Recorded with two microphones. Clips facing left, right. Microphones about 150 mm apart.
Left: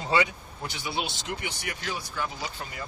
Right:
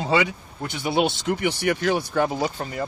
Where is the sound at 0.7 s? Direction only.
60° right (ahead or behind).